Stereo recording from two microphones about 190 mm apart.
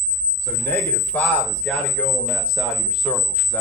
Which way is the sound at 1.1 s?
5° left (ahead or behind).